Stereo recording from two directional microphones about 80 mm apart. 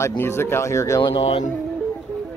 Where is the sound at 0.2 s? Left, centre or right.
Left.